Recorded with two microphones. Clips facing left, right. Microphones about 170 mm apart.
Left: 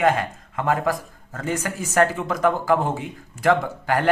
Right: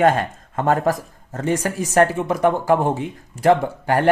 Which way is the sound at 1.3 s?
25° right (ahead or behind).